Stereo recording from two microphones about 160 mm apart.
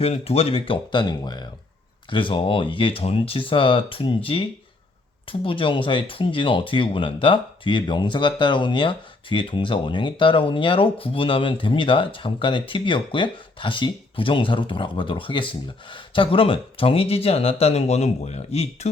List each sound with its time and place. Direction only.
0.0 s speech: 40° left (ahead or behind)